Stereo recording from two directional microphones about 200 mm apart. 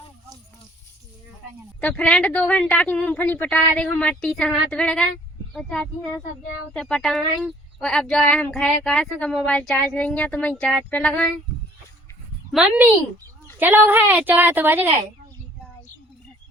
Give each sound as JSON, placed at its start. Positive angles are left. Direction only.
{"t": 1.8, "sound": "a woman's voice", "side_deg": 5}
{"t": 12.5, "sound": "a woman's voice", "side_deg": -5}